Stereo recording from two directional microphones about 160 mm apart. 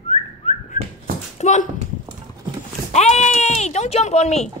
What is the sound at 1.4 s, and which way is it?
Speech, 50° left (ahead or behind).